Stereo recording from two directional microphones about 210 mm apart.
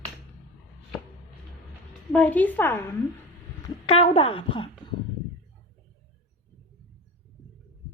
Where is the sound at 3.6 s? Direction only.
25° left (ahead or behind).